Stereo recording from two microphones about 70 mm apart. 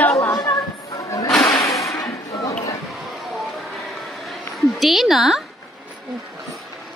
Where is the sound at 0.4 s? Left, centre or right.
Left.